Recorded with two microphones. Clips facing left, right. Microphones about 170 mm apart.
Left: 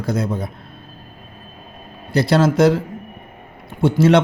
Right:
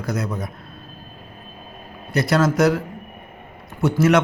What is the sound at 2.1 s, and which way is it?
A man's voice, 30° left (ahead or behind).